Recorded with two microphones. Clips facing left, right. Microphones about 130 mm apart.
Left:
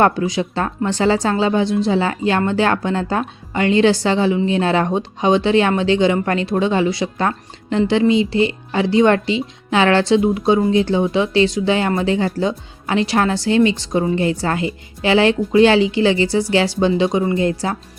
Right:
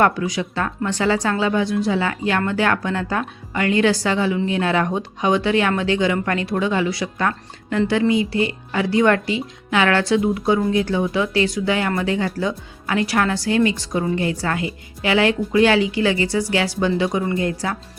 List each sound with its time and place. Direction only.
0.0 s speech: 30° left (ahead or behind)